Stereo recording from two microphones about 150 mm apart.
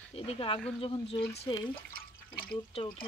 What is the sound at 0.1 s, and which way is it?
Speech, 35° left (ahead or behind).